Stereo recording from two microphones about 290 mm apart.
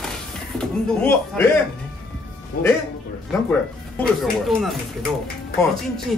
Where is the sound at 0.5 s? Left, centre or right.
Centre.